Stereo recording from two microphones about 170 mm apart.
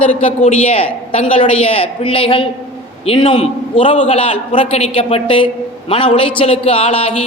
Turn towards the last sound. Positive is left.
turn(degrees=30)  # may be behind; listen again after turning